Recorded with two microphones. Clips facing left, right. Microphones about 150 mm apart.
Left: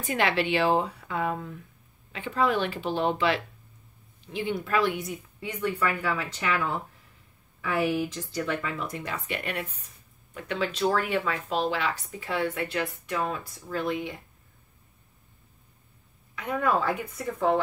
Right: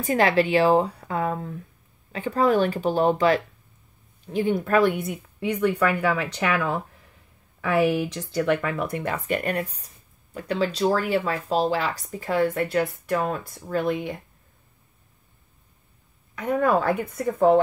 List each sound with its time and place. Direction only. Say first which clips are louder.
0.0 s speech: right 6 dB; 40° right (ahead or behind)
16.3 s speech: right 5 dB; 45° right (ahead or behind)